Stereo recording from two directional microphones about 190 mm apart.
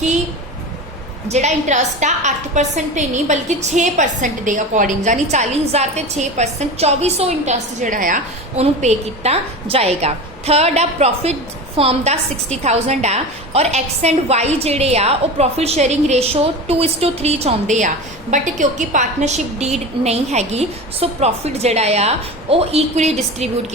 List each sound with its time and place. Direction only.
1.3 s a woman's voice: 35° right (ahead or behind)